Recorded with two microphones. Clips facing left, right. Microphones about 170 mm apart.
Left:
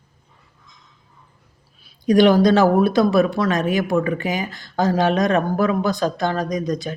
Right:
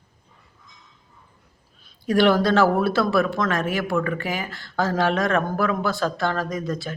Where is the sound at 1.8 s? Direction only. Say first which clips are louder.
Left 5 dB; 15° left (ahead or behind).